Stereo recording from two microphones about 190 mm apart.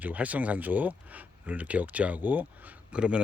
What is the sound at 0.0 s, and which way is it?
Speech, 10° right (ahead or behind).